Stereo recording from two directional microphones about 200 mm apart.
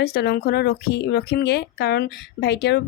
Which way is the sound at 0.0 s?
55° left (ahead or behind).